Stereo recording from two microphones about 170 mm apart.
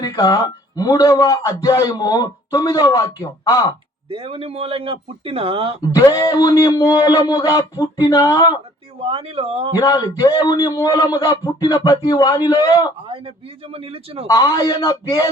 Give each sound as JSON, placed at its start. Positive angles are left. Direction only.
{"t": 0.0, "sound": "a man's voice", "side_deg": 25}
{"t": 4.1, "sound": "a man's voice", "side_deg": -35}
{"t": 5.9, "sound": "a man's voice", "side_deg": 20}
{"t": 9.0, "sound": "a man's voice", "side_deg": -35}
{"t": 9.7, "sound": "a man's voice", "side_deg": 20}
{"t": 13.1, "sound": "a man's voice", "side_deg": -35}
{"t": 14.3, "sound": "a man's voice", "side_deg": 25}